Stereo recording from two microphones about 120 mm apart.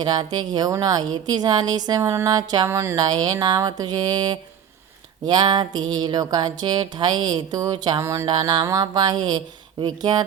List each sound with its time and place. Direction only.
0.0 s music: 35° right (ahead or behind)
2.6 s speech: 20° right (ahead or behind)
2.9 s music: 35° right (ahead or behind)
8.0 s speech: 25° right (ahead or behind)
8.3 s music: 40° right (ahead or behind)